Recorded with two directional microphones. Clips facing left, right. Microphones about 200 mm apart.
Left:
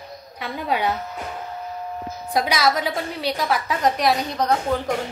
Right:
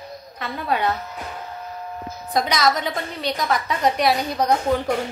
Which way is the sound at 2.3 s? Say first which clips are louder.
Even; 5° left (ahead or behind).